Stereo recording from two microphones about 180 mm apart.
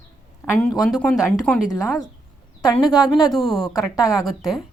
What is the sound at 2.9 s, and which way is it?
Speech, centre (ahead or behind).